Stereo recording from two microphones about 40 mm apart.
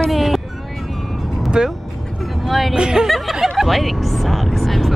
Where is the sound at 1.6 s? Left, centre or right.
Right.